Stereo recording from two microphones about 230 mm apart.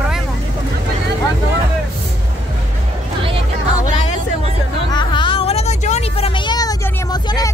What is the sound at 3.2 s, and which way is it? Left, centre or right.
Music, right.